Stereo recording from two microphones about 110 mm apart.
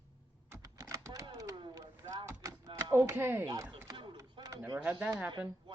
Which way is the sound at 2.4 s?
30° right (ahead or behind).